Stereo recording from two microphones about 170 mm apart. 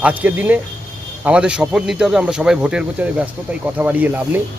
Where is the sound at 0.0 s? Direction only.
10° right (ahead or behind).